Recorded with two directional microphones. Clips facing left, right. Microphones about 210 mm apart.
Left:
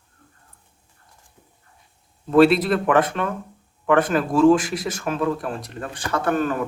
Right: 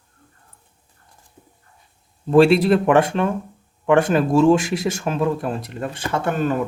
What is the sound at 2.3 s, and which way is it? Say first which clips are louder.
Speech: right 2 dB; 30° right (ahead or behind).